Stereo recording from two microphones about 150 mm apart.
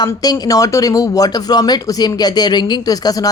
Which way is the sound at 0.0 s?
25° left (ahead or behind).